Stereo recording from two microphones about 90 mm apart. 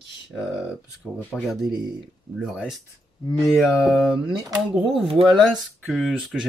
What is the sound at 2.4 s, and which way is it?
Speech, 10° right (ahead or behind).